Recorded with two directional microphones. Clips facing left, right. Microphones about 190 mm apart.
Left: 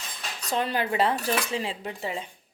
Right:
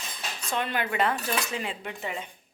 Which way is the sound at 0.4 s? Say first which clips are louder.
Left 3 dB; 35° left (ahead or behind).